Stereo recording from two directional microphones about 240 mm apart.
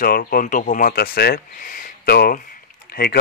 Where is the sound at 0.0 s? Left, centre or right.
Left.